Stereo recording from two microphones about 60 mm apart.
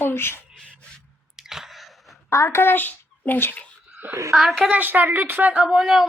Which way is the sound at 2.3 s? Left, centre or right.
Left.